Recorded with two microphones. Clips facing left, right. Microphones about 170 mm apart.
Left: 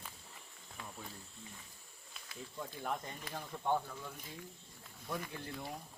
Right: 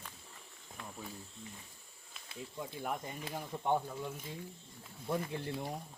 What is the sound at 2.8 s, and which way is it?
Speech, 10° right (ahead or behind).